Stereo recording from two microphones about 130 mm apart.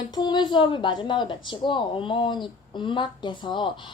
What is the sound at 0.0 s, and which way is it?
Speech, 30° left (ahead or behind).